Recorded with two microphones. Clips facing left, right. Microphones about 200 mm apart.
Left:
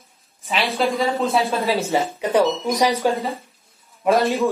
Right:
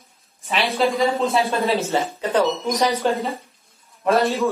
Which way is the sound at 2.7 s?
15° left (ahead or behind).